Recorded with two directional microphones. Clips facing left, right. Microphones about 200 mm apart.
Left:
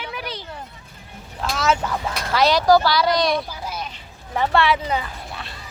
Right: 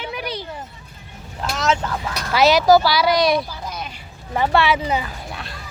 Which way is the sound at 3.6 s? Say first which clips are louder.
Even; 5° left (ahead or behind).